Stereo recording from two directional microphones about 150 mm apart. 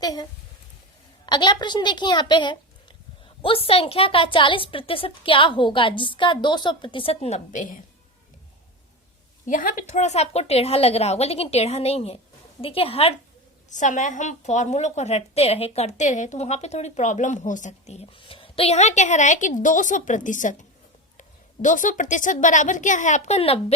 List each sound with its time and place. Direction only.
0.0 s a woman's voice: 25° left (ahead or behind); by 7.8 s 60° left (ahead or behind)
9.5 s a woman's voice: 60° left (ahead or behind); by 13.1 s 40° left (ahead or behind)
13.7 s a woman's voice: 55° left (ahead or behind)
18.2 s a woman's voice: 35° left (ahead or behind)